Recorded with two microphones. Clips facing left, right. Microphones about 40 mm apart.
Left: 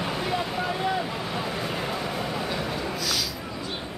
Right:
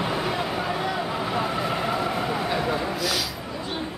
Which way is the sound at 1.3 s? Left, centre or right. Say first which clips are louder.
Right 4 dB; centre.